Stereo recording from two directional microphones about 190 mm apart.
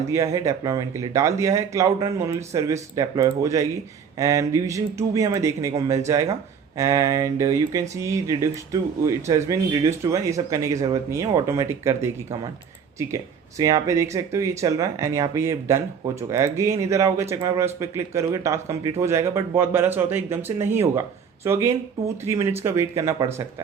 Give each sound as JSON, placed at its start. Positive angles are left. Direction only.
{"t": 0.1, "sound": "speech", "side_deg": -15}
{"t": 13.6, "sound": "speech", "side_deg": -20}